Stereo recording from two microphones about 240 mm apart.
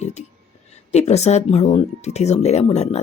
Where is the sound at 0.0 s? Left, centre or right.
Left.